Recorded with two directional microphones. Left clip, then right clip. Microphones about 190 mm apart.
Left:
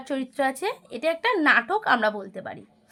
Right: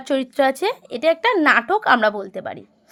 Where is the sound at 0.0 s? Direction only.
40° right (ahead or behind).